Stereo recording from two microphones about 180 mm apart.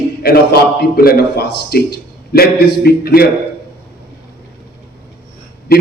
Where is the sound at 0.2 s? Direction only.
60° left (ahead or behind).